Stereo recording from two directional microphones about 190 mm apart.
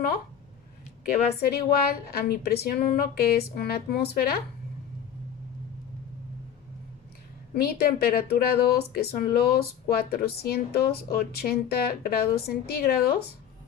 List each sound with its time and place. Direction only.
1.4 s speech: 55° left (ahead or behind)
7.5 s speech: 55° left (ahead or behind)